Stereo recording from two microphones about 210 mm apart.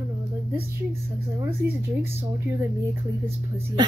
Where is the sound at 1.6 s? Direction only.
50° right (ahead or behind).